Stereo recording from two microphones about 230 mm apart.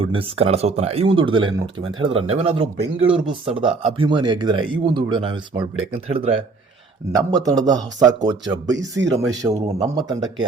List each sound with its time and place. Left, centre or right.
0.0 s speech: right
9.6 s speech: right
9.9 s speech: centre